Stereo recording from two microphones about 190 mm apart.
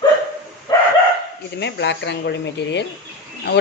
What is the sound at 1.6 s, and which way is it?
Speech, 65° left (ahead or behind).